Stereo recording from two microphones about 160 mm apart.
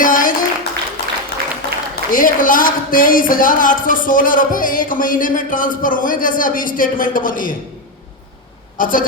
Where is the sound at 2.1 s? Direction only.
60° left (ahead or behind).